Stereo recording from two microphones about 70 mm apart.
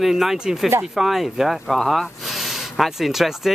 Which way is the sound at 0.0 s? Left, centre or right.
Centre.